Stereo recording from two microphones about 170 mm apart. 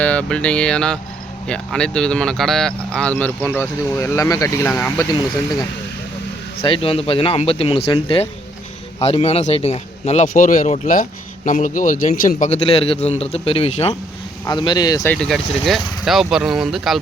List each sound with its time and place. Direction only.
0.0 s speech: 10° left (ahead or behind)
6.6 s a man's voice: 30° left (ahead or behind)
10.2 s a man's voice: 50° left (ahead or behind)
12.6 s a man's voice: 35° left (ahead or behind)
14.4 s speech: 25° left (ahead or behind)
15.1 s speech: 5° left (ahead or behind)